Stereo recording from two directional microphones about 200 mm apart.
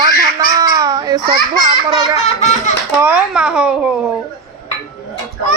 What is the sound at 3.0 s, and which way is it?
Speech, 5° right (ahead or behind).